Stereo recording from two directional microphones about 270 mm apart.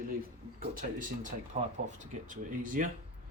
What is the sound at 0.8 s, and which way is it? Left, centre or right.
Speech, right.